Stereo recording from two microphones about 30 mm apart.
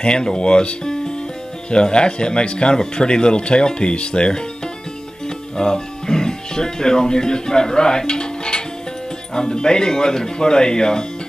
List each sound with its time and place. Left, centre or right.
0.0 s speech: left
5.6 s speech: left
8.1 s music: left
9.3 s speech: left